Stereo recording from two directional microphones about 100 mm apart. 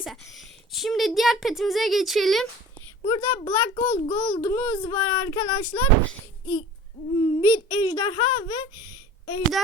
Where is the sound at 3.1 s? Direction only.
60° left (ahead or behind).